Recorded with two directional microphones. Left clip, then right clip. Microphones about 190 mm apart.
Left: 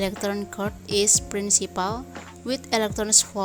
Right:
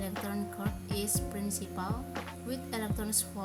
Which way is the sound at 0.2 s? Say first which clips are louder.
Left 11 dB; 45° left (ahead or behind).